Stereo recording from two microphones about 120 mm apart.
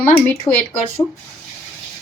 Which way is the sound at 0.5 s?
45° left (ahead or behind).